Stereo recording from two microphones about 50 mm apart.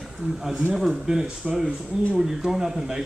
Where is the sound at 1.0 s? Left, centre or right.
Centre.